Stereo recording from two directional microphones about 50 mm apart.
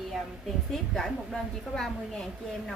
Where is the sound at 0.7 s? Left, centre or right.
Centre.